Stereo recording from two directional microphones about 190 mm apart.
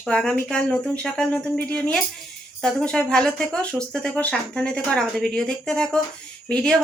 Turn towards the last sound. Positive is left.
turn(degrees=0)  # may be behind; listen again after turning